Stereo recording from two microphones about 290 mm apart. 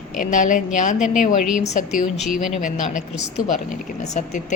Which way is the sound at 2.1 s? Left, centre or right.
Centre.